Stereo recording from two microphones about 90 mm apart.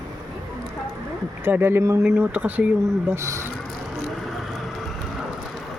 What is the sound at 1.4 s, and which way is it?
Speech, 25° right (ahead or behind).